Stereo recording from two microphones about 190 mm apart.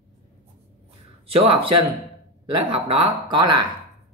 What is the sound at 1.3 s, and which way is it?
Speech, 30° right (ahead or behind).